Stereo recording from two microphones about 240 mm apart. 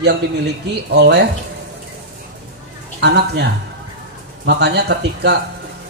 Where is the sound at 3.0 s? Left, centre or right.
Right.